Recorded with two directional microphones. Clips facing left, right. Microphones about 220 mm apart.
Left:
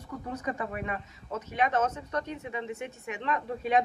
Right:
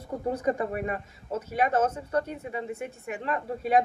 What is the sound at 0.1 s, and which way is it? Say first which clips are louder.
Speech: right 7 dB; 30° right (ahead or behind).